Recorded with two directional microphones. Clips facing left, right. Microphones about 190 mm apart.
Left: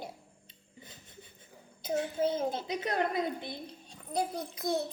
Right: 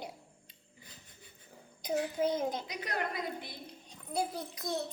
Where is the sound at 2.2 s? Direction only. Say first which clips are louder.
Left 2 dB; 15° right (ahead or behind).